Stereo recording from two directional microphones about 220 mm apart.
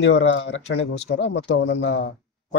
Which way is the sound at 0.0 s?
55° left (ahead or behind).